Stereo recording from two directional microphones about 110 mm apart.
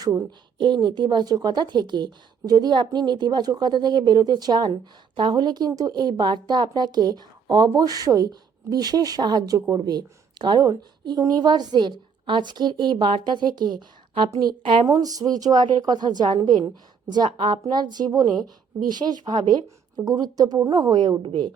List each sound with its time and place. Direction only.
0.3 s a woman's voice: 45° right (ahead or behind)
14.8 s speech: 35° right (ahead or behind)